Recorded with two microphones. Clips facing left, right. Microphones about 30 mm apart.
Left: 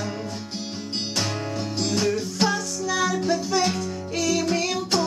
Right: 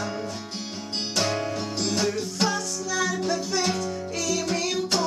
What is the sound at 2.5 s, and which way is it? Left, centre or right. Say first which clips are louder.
Music: left 2 dB; left.